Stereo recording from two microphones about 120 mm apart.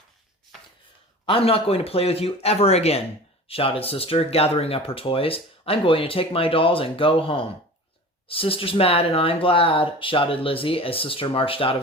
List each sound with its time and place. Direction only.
1.2 s speech: 50° left (ahead or behind)